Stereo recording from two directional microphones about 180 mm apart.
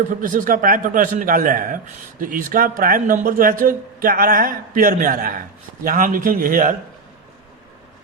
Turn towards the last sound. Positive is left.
turn(degrees=-50)  # may be behind; listen again after turning